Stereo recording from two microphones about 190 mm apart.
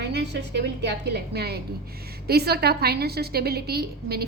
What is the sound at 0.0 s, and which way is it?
A woman's voice, 65° right (ahead or behind).